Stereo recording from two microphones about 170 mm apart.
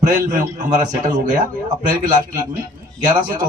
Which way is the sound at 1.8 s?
50° right (ahead or behind).